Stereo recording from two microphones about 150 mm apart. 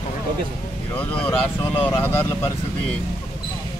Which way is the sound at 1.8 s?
15° left (ahead or behind).